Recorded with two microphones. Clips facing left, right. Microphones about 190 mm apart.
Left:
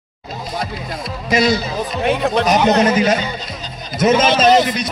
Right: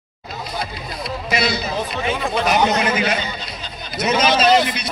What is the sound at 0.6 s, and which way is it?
Speech, 45° left (ahead or behind).